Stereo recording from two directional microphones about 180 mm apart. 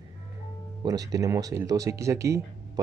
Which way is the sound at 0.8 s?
20° right (ahead or behind).